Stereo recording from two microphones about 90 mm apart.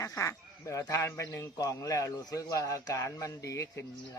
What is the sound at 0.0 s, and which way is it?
A woman's voice, 35° left (ahead or behind).